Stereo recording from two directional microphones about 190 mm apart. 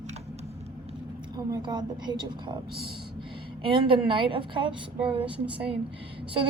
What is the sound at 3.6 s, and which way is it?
A woman's voice, 25° right (ahead or behind).